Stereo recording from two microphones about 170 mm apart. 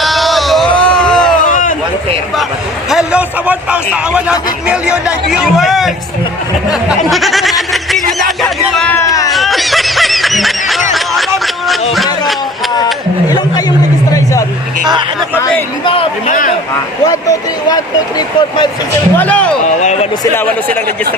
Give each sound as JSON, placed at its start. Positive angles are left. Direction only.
{"t": 0.0, "sound": "a sound", "side_deg": 0}
{"t": 1.5, "sound": "a sound", "side_deg": 50}
{"t": 2.9, "sound": "a man's voice", "side_deg": -5}
{"t": 6.8, "sound": "a sound", "side_deg": 0}
{"t": 8.4, "sound": "music", "side_deg": 0}
{"t": 9.0, "sound": "a sound", "side_deg": 20}
{"t": 9.3, "sound": "snicker", "side_deg": 0}
{"t": 10.9, "sound": "music", "side_deg": 0}
{"t": 15.8, "sound": "speech", "side_deg": 30}
{"t": 17.1, "sound": "speech", "side_deg": 20}
{"t": 19.1, "sound": "speech", "side_deg": 10}
{"t": 19.8, "sound": "speech", "side_deg": 40}
{"t": 20.3, "sound": "speech", "side_deg": 10}